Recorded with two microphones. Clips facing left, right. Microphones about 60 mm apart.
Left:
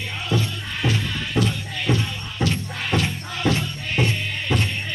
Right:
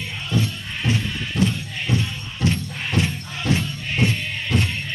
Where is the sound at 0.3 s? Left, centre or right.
Left.